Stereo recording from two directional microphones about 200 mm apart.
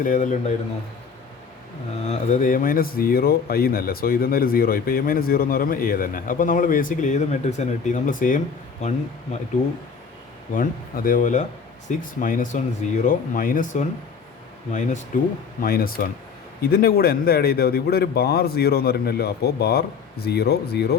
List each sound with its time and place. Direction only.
0.0 s speech: 40° left (ahead or behind)
2.0 s speech: 40° left (ahead or behind)
10.5 s speech: 45° left (ahead or behind)